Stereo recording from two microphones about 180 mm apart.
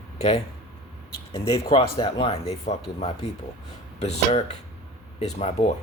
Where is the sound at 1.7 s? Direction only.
30° left (ahead or behind).